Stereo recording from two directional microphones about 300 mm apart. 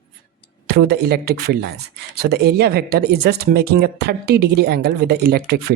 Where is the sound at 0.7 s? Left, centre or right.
Right.